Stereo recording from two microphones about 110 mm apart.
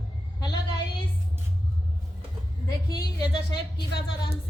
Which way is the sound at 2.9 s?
40° left (ahead or behind).